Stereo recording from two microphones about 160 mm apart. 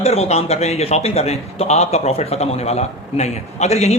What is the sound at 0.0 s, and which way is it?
A man's voice, 40° left (ahead or behind).